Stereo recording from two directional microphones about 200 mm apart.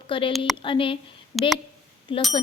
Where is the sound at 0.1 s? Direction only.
25° left (ahead or behind).